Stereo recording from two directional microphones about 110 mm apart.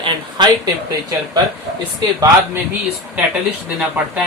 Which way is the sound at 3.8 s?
15° right (ahead or behind).